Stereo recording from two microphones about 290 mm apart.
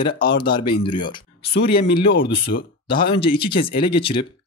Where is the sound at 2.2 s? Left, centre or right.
Left.